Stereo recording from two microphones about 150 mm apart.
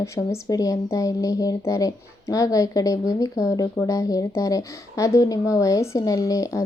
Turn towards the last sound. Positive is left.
turn(degrees=20)  # may be behind; listen again after turning